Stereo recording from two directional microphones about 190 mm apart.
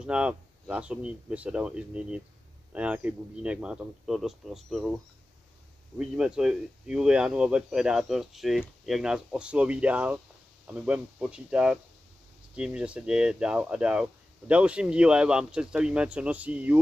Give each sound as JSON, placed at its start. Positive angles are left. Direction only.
{"t": 0.0, "sound": "speech", "side_deg": -5}